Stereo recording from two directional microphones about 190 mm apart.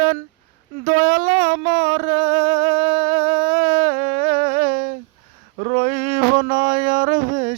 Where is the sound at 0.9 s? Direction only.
50° right (ahead or behind).